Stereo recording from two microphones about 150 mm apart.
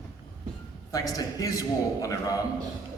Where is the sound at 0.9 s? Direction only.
25° left (ahead or behind).